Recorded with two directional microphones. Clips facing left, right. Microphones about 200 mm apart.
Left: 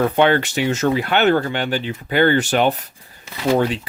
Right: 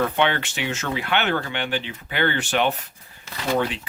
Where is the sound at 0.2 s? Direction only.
40° left (ahead or behind).